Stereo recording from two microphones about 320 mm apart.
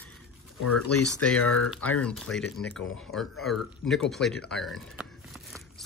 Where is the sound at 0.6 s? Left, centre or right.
Left.